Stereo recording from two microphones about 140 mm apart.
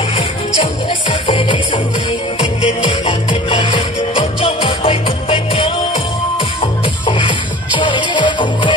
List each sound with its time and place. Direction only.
0.8 s music: 40° left (ahead or behind)